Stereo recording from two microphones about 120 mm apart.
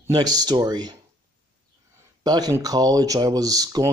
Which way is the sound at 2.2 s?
30° right (ahead or behind).